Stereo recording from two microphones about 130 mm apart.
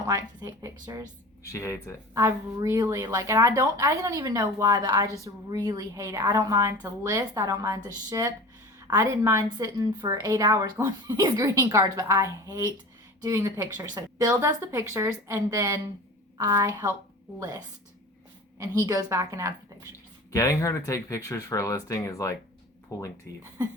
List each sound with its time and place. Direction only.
0.0 s a woman's voice: 30° right (ahead or behind)
1.5 s speech: 20° left (ahead or behind)
2.1 s a woman's voice: 20° right (ahead or behind)
18.5 s a woman's voice: 25° right (ahead or behind)
20.3 s speech: 25° left (ahead or behind)